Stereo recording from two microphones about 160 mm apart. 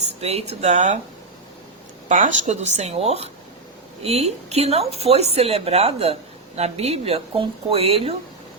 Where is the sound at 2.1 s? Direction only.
50° right (ahead or behind).